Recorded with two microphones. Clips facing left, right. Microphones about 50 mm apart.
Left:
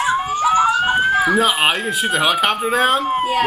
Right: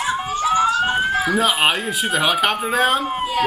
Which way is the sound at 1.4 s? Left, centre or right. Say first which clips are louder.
Left 1 dB; centre.